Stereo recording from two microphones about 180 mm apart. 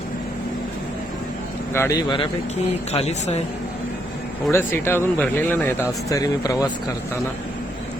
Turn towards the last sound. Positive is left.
turn(degrees=20)  # may be behind; listen again after turning